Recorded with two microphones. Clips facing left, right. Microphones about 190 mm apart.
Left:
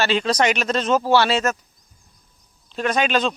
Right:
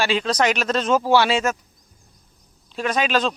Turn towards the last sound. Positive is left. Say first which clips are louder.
# left 1 dB
turn(degrees=0)  # may be behind; listen again after turning